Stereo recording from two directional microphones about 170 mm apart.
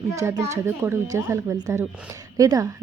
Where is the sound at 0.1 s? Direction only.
20° right (ahead or behind).